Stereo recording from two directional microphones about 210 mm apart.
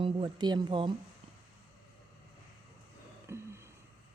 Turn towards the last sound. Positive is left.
turn(degrees=-10)  # may be behind; listen again after turning